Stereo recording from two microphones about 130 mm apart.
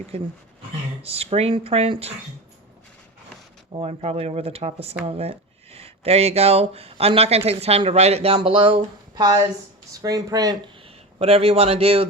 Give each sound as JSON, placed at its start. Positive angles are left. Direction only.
{"t": 0.1, "sound": "speech", "side_deg": -50}
{"t": 3.7, "sound": "speech", "side_deg": -50}
{"t": 10.8, "sound": "speech", "side_deg": -50}